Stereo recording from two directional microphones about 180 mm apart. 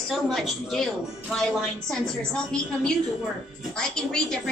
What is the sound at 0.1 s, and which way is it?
A woman's voice, centre (ahead or behind).